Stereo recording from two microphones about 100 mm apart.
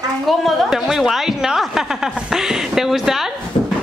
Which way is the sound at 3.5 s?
60° left (ahead or behind).